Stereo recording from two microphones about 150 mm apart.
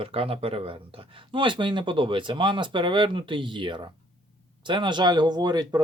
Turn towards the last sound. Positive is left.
turn(degrees=-25)  # may be behind; listen again after turning